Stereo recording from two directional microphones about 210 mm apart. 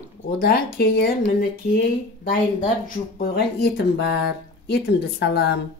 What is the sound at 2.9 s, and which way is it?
Speech, 50° left (ahead or behind).